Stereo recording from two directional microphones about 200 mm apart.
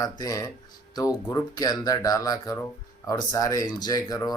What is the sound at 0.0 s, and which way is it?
Speech, 20° left (ahead or behind).